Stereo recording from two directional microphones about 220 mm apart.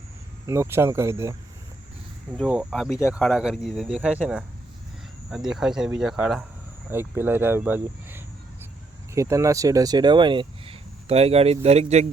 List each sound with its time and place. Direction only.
0.4 s speech: 15° right (ahead or behind)
2.5 s speech: 5° right (ahead or behind); by 12.0 s 30° right (ahead or behind)